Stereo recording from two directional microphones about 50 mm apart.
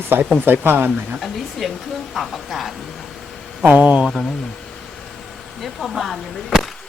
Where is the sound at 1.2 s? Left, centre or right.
Centre.